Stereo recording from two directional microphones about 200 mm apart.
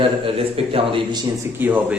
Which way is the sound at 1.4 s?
10° right (ahead or behind).